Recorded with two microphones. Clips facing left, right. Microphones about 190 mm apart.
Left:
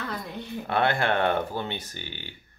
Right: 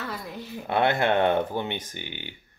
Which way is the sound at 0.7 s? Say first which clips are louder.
Right 2 dB; 20° right (ahead or behind).